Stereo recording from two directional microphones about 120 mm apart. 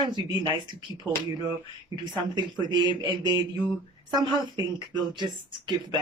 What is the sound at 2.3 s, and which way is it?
Speech, 40° right (ahead or behind).